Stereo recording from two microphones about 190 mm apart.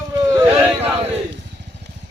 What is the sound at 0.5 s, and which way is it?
Male singing, 10° right (ahead or behind).